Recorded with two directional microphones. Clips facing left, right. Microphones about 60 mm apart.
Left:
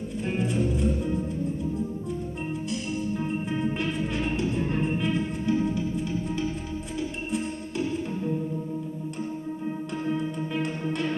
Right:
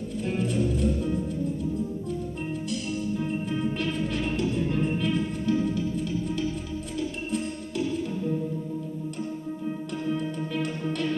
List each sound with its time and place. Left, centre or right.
0.3 s music: left
3.7 s music: left
7.0 s music: left
10.1 s music: left